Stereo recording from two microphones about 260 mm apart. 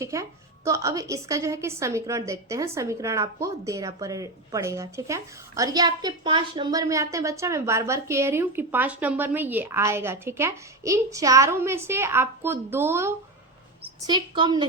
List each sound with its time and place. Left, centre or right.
0.0 s a woman's voice: centre